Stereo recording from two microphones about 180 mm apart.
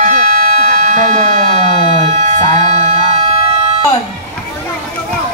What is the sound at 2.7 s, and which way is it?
Siren, 35° right (ahead or behind).